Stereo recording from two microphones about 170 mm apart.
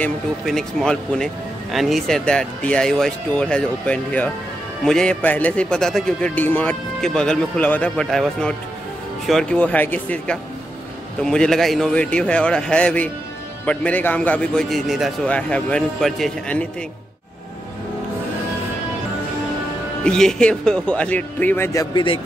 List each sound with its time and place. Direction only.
0.0 s a man's voice: centre (ahead or behind)
20.0 s a man's voice: 5° left (ahead or behind)
21.9 s speech: 30° left (ahead or behind)